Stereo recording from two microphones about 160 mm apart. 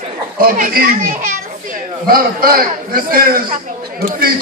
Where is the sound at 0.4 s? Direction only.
65° right (ahead or behind).